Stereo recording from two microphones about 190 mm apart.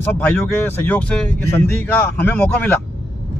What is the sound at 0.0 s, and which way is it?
Speech, 10° left (ahead or behind).